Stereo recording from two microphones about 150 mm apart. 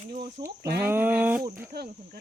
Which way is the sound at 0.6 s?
90° right.